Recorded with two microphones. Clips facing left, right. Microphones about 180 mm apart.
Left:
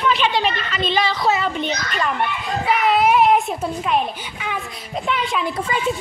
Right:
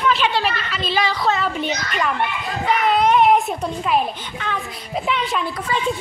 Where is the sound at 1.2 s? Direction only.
Centre (ahead or behind).